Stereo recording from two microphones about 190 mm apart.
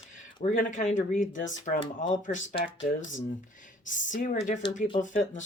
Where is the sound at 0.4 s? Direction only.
40° left (ahead or behind).